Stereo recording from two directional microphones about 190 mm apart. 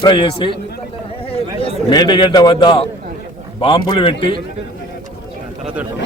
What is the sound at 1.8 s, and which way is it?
Speech, 25° left (ahead or behind).